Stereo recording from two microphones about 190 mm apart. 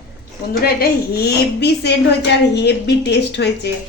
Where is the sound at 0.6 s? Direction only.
55° left (ahead or behind).